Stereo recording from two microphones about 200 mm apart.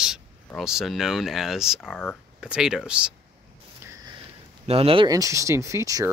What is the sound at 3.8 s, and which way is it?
Speech, 15° right (ahead or behind).